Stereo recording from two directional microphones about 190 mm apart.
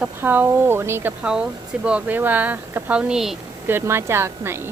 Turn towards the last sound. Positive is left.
turn(degrees=-10)  # may be behind; listen again after turning